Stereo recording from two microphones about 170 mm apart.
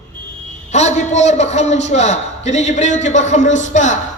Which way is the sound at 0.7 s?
40° left (ahead or behind).